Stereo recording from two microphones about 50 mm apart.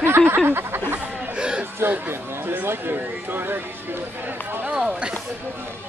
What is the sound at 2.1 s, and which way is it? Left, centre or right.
Speech, right.